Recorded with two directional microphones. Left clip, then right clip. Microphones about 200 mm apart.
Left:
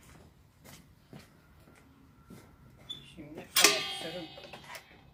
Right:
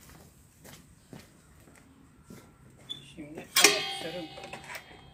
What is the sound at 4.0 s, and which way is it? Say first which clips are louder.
Music: right 3 dB; 15° right (ahead or behind).